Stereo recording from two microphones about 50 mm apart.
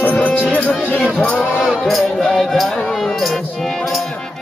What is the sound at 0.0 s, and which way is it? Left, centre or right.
Music, left.